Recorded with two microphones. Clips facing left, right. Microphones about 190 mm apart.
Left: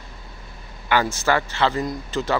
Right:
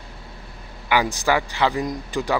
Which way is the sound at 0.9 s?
15° right (ahead or behind).